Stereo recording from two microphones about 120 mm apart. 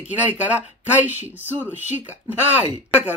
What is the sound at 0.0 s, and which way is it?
Speech, 10° right (ahead or behind).